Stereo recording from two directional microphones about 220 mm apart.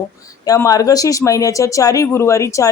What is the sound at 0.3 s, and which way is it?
Speech, 15° left (ahead or behind).